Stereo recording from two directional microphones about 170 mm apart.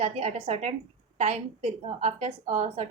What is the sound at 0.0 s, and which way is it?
A woman's voice, 35° right (ahead or behind).